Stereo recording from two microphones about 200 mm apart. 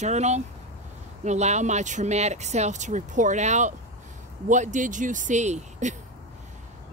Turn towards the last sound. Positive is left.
turn(degrees=-35)  # may be behind; listen again after turning